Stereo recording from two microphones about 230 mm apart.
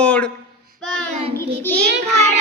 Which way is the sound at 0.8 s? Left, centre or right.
Centre.